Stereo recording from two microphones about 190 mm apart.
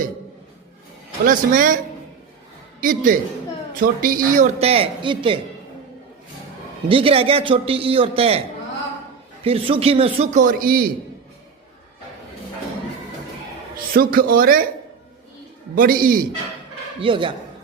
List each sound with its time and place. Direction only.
1.2 s speech: 45° right (ahead or behind)
2.8 s speech: 45° right (ahead or behind)
4.6 s a man's voice: 30° right (ahead or behind)
6.8 s a man's voice: 30° right (ahead or behind); by 10.9 s 50° right (ahead or behind)
13.9 s speech: 50° right (ahead or behind)
15.7 s speech: 50° right (ahead or behind)
17.0 s a man's voice: 25° right (ahead or behind)